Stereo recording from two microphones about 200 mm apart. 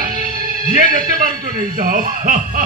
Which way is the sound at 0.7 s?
45° right (ahead or behind).